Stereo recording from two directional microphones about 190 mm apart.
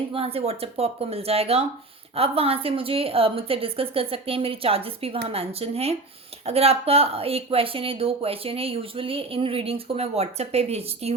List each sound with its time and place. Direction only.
0.1 s a woman's voice: 30° right (ahead or behind)